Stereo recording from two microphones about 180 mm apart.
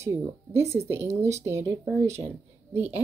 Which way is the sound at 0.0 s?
15° right (ahead or behind).